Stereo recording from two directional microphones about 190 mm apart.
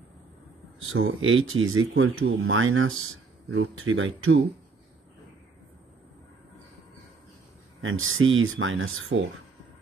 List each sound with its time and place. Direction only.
0.9 s speech: 90° right
7.8 s speech: 90° right